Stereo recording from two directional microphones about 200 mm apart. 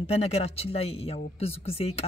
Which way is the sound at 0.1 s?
30° left (ahead or behind).